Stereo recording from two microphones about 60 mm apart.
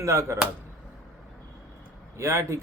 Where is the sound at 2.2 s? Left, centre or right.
Right.